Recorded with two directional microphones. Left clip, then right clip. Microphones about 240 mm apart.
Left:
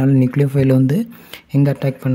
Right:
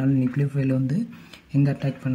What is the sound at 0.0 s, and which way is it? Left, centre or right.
Speech, left.